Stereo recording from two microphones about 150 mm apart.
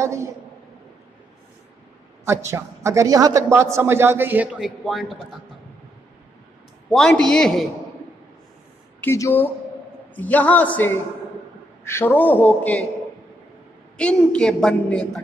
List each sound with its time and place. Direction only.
0.0 s a woman's voice: 20° right (ahead or behind)
2.2 s a man's voice: 20° right (ahead or behind); by 5.2 s centre (ahead or behind)
6.9 s a man's voice: 5° left (ahead or behind)
9.0 s a woman's voice: 15° left (ahead or behind)
13.9 s a woman's voice: 5° left (ahead or behind)